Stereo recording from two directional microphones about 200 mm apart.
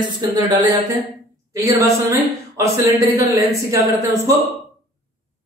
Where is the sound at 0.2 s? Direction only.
20° right (ahead or behind).